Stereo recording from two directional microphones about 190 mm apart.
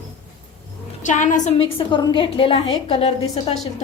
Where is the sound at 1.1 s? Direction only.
40° left (ahead or behind).